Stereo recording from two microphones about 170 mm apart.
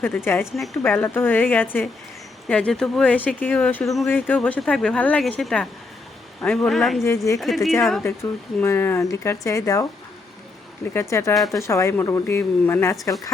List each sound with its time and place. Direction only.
0.5 s a man's voice: centre (ahead or behind)
0.9 s a man's voice: 10° left (ahead or behind)
8.0 s speech: 15° left (ahead or behind)
11.1 s speech: 20° left (ahead or behind)
11.3 s a man's voice: centre (ahead or behind)
11.6 s speech: 15° left (ahead or behind)